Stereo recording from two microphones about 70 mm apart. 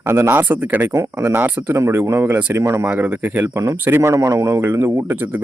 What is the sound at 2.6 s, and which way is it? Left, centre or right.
Speech, right.